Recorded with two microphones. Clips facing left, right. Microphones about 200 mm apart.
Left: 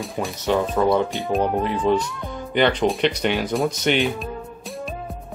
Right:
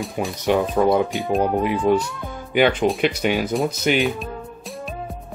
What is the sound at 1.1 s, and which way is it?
Speech, centre (ahead or behind).